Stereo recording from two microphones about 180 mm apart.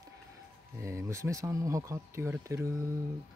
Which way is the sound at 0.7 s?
15° right (ahead or behind).